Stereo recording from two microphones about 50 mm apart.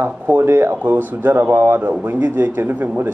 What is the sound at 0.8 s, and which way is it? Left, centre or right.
Speech, right.